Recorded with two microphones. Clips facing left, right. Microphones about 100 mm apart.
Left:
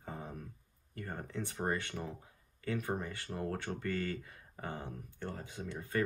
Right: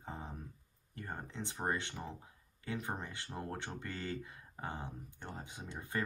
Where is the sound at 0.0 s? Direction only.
25° right (ahead or behind).